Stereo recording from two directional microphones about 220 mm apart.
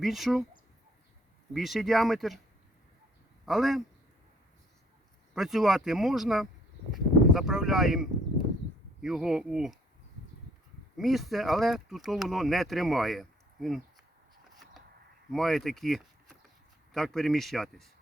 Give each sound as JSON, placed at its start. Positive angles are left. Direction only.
{"t": 0.0, "sound": "speech", "side_deg": 0}
{"t": 1.5, "sound": "speech", "side_deg": 0}
{"t": 3.4, "sound": "speech", "side_deg": 0}
{"t": 5.3, "sound": "speech", "side_deg": 0}
{"t": 10.9, "sound": "speech", "side_deg": 0}
{"t": 15.3, "sound": "speech", "side_deg": 0}